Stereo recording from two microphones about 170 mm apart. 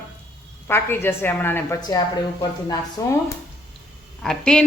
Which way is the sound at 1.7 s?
25° left (ahead or behind).